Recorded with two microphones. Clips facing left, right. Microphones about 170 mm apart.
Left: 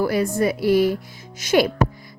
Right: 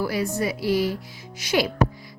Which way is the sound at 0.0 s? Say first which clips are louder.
Left 5 dB; 50° left (ahead or behind).